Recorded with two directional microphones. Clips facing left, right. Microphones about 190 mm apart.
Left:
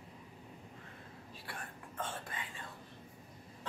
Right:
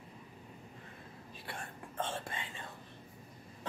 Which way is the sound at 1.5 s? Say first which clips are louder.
Right 3 dB; 25° right (ahead or behind).